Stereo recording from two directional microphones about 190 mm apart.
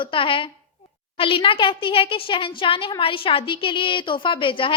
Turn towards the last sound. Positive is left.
turn(degrees=25)  # may be behind; listen again after turning